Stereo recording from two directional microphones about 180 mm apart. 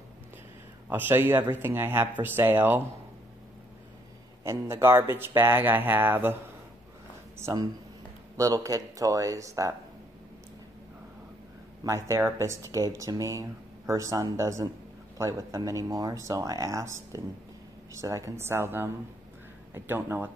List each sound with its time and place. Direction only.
0.8 s speech: 10° right (ahead or behind)
4.5 s speech: 15° right (ahead or behind)
7.3 s speech: 15° right (ahead or behind)
11.8 s speech: 15° right (ahead or behind)